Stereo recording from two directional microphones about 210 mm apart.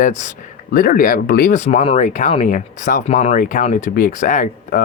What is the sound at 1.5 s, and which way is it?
Speech, 35° left (ahead or behind).